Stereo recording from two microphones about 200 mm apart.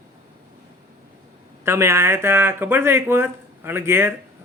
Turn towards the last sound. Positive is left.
turn(degrees=-10)  # may be behind; listen again after turning